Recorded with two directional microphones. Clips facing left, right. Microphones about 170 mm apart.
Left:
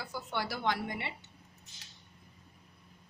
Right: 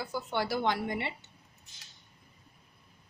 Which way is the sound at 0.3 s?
25° right (ahead or behind).